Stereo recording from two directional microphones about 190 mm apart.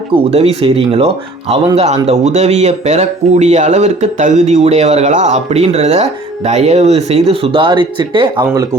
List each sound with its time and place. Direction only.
0.3 s speech: 30° right (ahead or behind)